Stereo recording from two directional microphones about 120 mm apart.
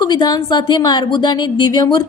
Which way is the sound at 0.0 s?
35° left (ahead or behind).